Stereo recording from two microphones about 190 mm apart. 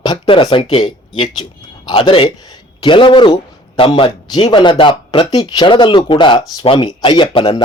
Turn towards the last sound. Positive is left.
turn(degrees=25)  # may be behind; listen again after turning